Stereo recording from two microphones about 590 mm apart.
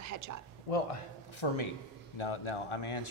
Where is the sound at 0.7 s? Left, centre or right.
Left.